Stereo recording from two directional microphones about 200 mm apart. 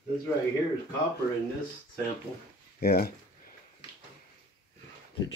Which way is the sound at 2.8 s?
50° left (ahead or behind).